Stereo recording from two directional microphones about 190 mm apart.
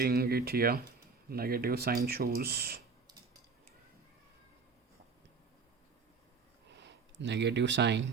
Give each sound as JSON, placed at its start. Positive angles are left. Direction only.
{"t": 0.0, "sound": "speech", "side_deg": -55}
{"t": 6.7, "sound": "speech", "side_deg": -70}